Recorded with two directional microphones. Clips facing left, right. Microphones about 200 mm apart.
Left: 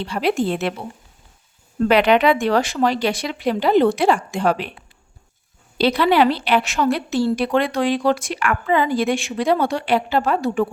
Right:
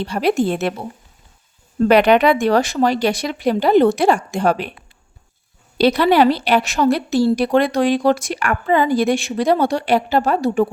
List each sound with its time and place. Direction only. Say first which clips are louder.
0.0 s speech: right 3 dB; 40° right (ahead or behind)
1.8 s speech: right 3 dB; 45° right (ahead or behind)
5.8 s a woman's voice: right 3 dB; 45° right (ahead or behind)